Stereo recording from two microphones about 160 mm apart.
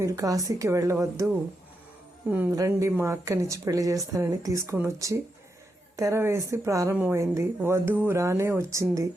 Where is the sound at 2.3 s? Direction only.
10° right (ahead or behind).